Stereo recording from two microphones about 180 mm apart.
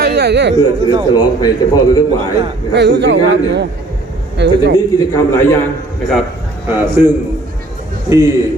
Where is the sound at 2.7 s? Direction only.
75° right (ahead or behind).